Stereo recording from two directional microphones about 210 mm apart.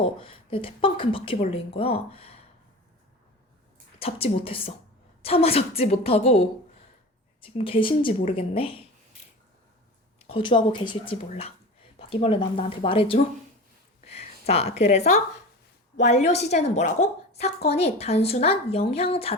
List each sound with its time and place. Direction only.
0.0 s a woman's voice: 25° left (ahead or behind)
4.0 s a woman's voice: 25° left (ahead or behind)
10.2 s a woman's voice: 25° left (ahead or behind)